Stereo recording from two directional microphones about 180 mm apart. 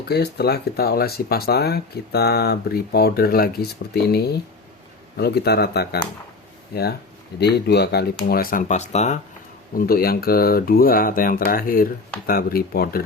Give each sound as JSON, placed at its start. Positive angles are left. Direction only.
{"t": 0.1, "sound": "speech", "side_deg": 65}
{"t": 9.7, "sound": "speech", "side_deg": 55}